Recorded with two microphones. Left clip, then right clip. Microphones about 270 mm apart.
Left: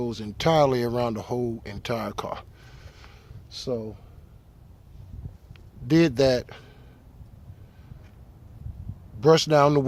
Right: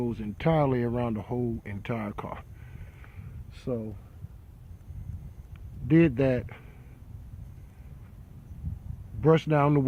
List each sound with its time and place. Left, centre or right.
0.0 s speech: left
3.5 s speech: centre
5.9 s speech: left
9.2 s speech: left